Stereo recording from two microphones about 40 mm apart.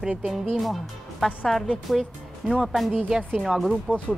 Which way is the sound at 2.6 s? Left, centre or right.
Centre.